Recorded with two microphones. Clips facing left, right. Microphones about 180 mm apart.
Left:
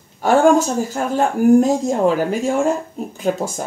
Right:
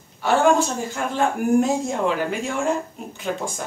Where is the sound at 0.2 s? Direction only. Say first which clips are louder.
Left 5 dB; 45° left (ahead or behind).